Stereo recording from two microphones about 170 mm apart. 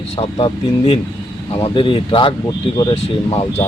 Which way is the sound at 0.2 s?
30° left (ahead or behind).